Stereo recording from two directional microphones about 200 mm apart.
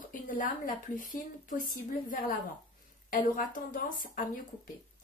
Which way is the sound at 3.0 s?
40° left (ahead or behind).